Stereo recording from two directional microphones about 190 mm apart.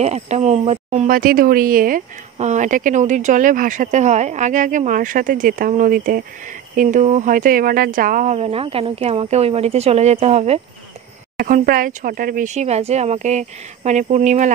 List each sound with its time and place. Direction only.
0.0 s a woman's voice: 35° right (ahead or behind)
1.1 s a woman's voice: 50° right (ahead or behind); by 10.6 s 35° right (ahead or behind)
11.3 s a woman's voice: 50° right (ahead or behind)